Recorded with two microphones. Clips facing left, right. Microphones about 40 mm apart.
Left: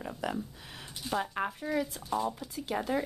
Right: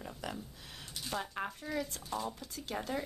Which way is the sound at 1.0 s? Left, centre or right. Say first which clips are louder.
Left 6 dB; centre.